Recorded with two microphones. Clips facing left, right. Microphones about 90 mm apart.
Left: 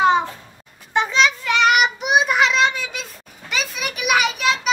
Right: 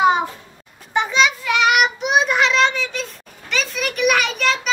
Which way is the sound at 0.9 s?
5° right (ahead or behind).